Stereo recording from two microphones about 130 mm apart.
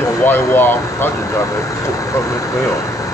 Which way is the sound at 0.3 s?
15° left (ahead or behind).